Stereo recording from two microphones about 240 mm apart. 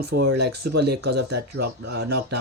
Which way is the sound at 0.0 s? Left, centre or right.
Right.